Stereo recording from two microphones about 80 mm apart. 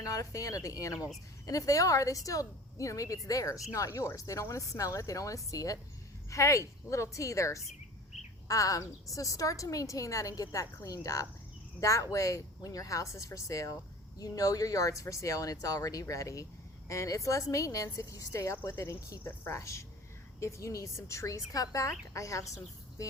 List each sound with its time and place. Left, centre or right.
0.0 s a woman's voice: left